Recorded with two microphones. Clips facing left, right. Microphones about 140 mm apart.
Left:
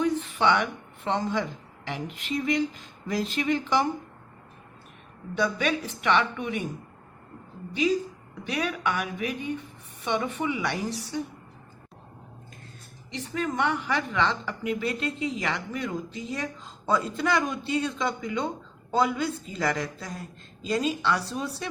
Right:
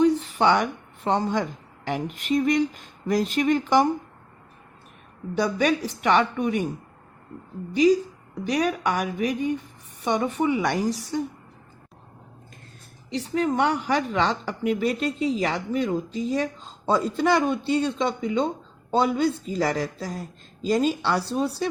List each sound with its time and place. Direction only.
0.0 s a woman's voice: 35° right (ahead or behind)
5.4 s speech: 35° right (ahead or behind)
7.7 s speech: 40° right (ahead or behind)
13.6 s speech: 40° right (ahead or behind)